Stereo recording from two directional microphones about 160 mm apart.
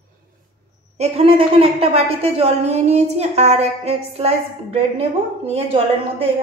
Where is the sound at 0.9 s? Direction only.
40° right (ahead or behind).